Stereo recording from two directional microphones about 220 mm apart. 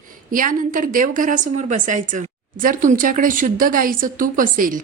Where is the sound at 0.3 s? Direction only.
40° right (ahead or behind).